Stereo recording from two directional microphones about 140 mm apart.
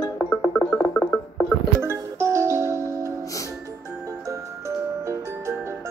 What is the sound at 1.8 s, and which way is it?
Music, 20° right (ahead or behind).